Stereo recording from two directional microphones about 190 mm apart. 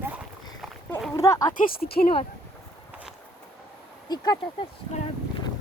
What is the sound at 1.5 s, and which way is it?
Speech, 50° left (ahead or behind).